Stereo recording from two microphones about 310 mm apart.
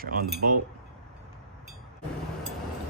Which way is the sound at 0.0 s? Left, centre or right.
Right.